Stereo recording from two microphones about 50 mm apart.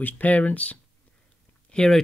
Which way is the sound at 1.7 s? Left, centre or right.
Centre.